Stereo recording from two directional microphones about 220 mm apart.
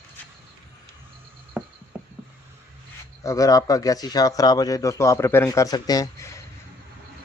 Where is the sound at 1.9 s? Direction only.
5° right (ahead or behind).